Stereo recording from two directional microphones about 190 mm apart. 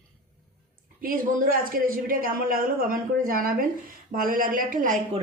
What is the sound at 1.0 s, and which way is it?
A woman's voice, 50° right (ahead or behind).